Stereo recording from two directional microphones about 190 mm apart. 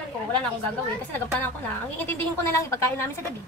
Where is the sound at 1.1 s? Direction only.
10° left (ahead or behind).